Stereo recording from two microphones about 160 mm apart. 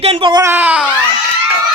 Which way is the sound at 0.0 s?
35° right (ahead or behind).